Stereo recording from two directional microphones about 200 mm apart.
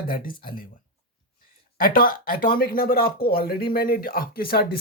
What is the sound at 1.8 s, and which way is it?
Speech, 45° left (ahead or behind).